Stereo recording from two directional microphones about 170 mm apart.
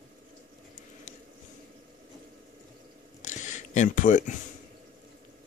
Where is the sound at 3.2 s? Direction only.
45° left (ahead or behind).